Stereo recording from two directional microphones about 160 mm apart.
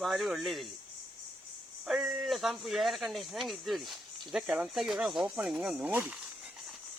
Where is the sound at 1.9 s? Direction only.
5° right (ahead or behind).